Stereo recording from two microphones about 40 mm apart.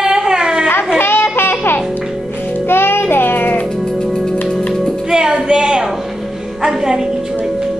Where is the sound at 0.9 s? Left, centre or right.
Left.